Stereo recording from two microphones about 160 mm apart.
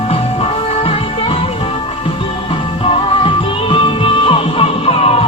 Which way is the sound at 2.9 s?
35° left (ahead or behind).